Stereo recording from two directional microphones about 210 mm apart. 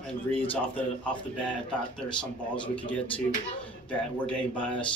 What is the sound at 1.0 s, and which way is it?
Speech, 5° left (ahead or behind).